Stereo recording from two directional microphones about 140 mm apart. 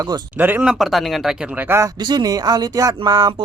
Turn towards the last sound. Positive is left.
turn(degrees=-30)  # may be behind; listen again after turning